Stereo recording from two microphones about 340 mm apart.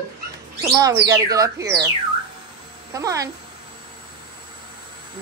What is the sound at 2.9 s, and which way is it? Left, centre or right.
Speech, centre.